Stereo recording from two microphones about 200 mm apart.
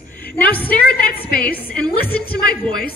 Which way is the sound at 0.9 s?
50° left (ahead or behind).